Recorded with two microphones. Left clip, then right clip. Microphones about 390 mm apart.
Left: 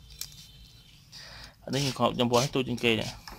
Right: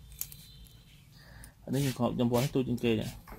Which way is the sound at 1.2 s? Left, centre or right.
Left.